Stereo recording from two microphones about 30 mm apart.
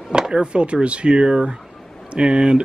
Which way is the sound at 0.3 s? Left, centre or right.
Right.